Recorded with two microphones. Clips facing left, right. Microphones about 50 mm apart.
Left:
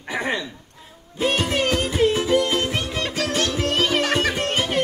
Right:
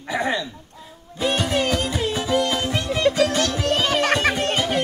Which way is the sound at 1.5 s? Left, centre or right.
Left.